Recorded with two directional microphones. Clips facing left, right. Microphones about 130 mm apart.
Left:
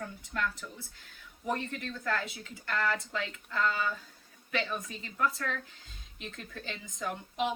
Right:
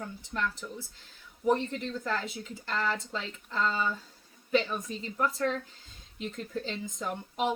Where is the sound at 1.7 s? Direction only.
25° right (ahead or behind).